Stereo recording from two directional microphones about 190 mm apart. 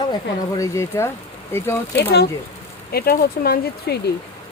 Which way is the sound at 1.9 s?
60° left (ahead or behind).